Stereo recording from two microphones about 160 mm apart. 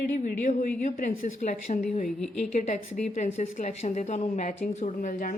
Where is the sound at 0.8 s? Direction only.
55° left (ahead or behind).